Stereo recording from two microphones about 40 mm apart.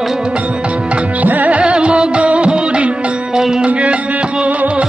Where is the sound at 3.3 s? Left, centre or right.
Centre.